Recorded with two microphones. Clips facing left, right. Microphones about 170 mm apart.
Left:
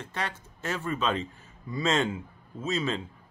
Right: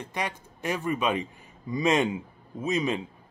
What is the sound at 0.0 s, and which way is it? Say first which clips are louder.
Speech: right 2 dB; 15° right (ahead or behind).